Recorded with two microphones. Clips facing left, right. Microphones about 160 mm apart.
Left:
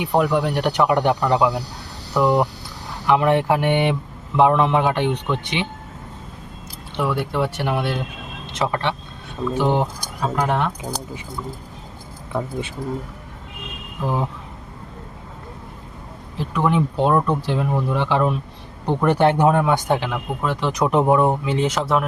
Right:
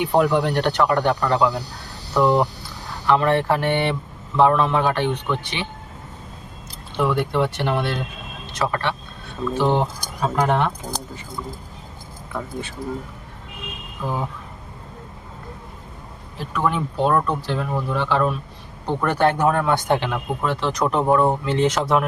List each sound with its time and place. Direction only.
0.0 s speech: centre (ahead or behind); by 5.6 s 20° left (ahead or behind)
7.0 s speech: 5° left (ahead or behind)
8.5 s speech: 20° left (ahead or behind); by 11.0 s centre (ahead or behind)
12.3 s speech: 20° left (ahead or behind)
14.0 s speech: 30° left (ahead or behind)
16.4 s speech: 20° left (ahead or behind); by 20.6 s centre (ahead or behind)
20.6 s speech: 15° left (ahead or behind)